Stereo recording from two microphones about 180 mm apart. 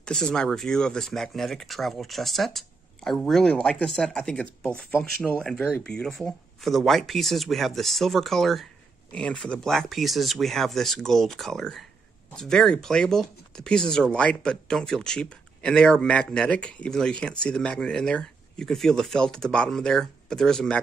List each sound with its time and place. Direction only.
0.0 s speech: 5° left (ahead or behind)